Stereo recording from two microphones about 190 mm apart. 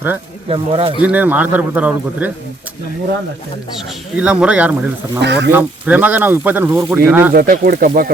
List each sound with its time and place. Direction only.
0.4 s speech: 30° right (ahead or behind)
1.0 s speech: 10° right (ahead or behind)
4.2 s speech: 5° right (ahead or behind)
5.2 s speech: 65° right (ahead or behind)
5.5 s speech: 10° right (ahead or behind)
7.3 s speech: 50° right (ahead or behind)